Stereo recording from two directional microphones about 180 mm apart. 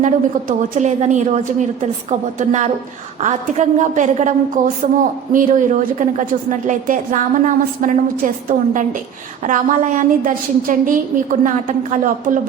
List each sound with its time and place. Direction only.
0.0 s a woman's voice: 45° right (ahead or behind)